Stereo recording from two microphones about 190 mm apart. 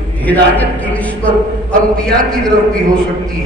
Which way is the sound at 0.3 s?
10° left (ahead or behind).